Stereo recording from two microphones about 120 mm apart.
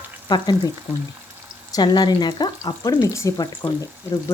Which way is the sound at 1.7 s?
35° left (ahead or behind).